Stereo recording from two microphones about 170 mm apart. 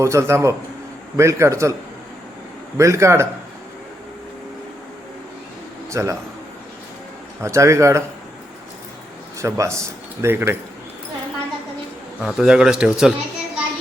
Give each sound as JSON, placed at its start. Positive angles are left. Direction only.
{"t": 0.0, "sound": "a man's voice", "side_deg": -15}
{"t": 2.7, "sound": "a man's voice", "side_deg": -15}
{"t": 5.9, "sound": "a man's voice", "side_deg": -15}
{"t": 7.4, "sound": "a man's voice", "side_deg": -15}
{"t": 9.4, "sound": "a man's voice", "side_deg": -15}
{"t": 12.2, "sound": "speech", "side_deg": 0}